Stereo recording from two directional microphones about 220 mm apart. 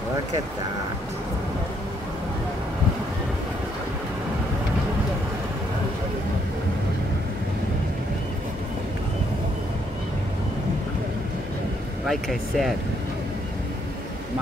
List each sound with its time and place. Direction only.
12.1 s speech: centre (ahead or behind)